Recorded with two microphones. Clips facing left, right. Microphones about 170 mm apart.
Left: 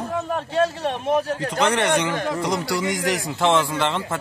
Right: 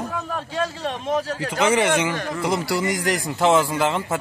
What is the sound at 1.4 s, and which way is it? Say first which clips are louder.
Speech: right 1 dB; 5° right (ahead or behind).